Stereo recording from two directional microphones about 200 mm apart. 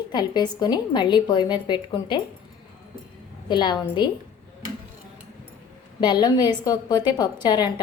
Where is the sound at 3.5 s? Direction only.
25° left (ahead or behind).